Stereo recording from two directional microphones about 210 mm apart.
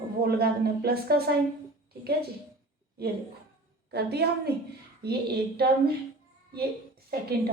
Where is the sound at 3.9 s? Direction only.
50° right (ahead or behind).